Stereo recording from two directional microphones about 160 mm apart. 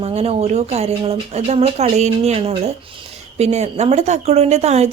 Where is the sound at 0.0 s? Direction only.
40° right (ahead or behind).